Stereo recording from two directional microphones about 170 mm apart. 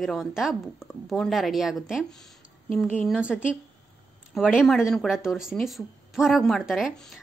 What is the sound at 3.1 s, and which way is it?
Speech, 5° right (ahead or behind).